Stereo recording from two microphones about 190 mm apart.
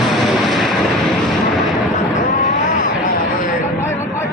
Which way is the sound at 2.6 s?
45° left (ahead or behind).